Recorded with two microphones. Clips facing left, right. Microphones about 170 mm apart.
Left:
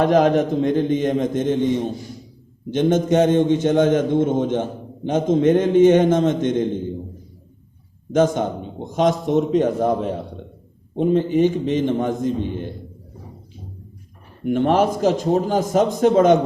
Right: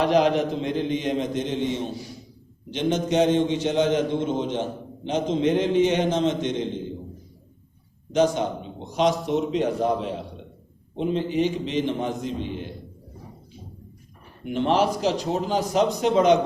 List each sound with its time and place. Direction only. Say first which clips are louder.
0.0 s a man's voice: left 4 dB; 50° left (ahead or behind)
8.1 s a man's voice: left 3 dB; 50° left (ahead or behind)
14.4 s a man's voice: left 4 dB; 50° left (ahead or behind)